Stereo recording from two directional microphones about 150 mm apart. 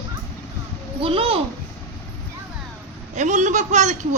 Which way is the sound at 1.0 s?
40° right (ahead or behind).